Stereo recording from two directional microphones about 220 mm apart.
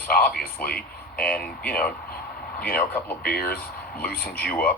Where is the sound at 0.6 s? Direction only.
45° left (ahead or behind).